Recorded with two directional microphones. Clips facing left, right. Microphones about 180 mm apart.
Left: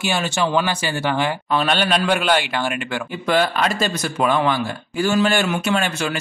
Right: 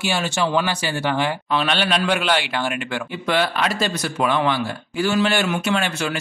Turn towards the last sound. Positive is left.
turn(degrees=45)  # may be behind; listen again after turning